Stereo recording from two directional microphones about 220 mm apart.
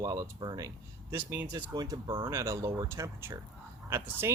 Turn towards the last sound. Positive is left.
turn(degrees=-10)  # may be behind; listen again after turning